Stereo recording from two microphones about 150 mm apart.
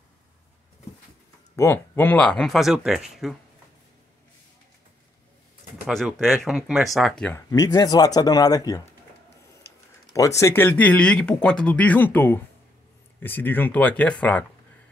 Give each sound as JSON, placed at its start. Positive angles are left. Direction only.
{"t": 1.6, "sound": "speech", "side_deg": 15}
{"t": 5.9, "sound": "speech", "side_deg": 0}
{"t": 7.3, "sound": "speech", "side_deg": 25}
{"t": 10.1, "sound": "speech", "side_deg": 20}